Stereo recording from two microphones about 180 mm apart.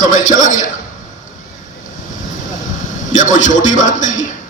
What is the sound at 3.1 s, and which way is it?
A man's voice, 45° left (ahead or behind).